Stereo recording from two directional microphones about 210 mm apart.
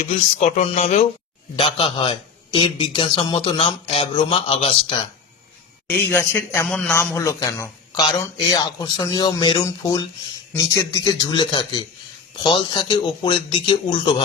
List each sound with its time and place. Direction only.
0.0 s a man's voice: 35° left (ahead or behind)
5.9 s a man's voice: 10° left (ahead or behind)